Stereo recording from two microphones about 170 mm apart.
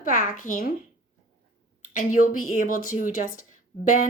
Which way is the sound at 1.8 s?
50° left (ahead or behind).